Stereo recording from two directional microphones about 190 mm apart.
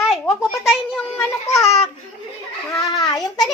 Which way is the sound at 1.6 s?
35° left (ahead or behind).